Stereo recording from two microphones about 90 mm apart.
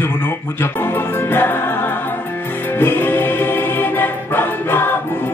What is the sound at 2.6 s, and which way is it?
Music, 25° left (ahead or behind).